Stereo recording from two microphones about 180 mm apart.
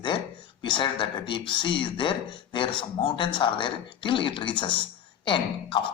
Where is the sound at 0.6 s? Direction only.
25° left (ahead or behind).